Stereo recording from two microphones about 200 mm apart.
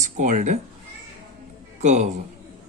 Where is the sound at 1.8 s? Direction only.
35° right (ahead or behind).